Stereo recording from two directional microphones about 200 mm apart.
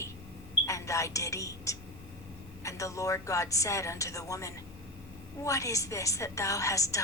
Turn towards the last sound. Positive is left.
turn(degrees=15)  # may be behind; listen again after turning